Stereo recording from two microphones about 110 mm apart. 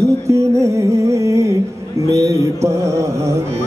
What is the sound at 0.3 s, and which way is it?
A man's voice, 30° right (ahead or behind).